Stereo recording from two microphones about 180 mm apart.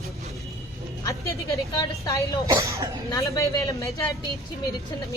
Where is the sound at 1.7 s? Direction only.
20° left (ahead or behind).